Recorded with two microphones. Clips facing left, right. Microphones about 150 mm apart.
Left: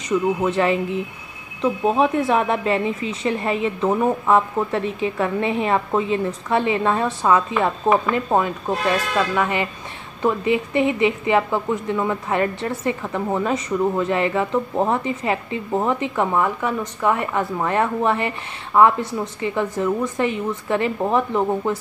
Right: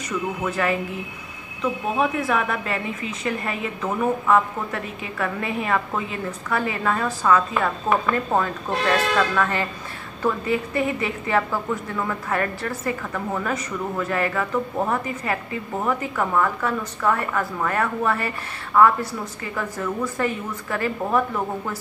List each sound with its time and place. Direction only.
0.4 s a woman's voice: 25° left (ahead or behind)